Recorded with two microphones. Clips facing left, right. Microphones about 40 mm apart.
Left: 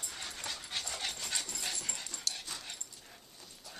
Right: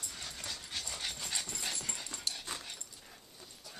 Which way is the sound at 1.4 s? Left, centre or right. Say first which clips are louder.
Even; centre.